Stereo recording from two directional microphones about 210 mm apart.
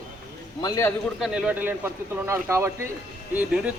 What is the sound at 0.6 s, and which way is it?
Speech, 15° left (ahead or behind).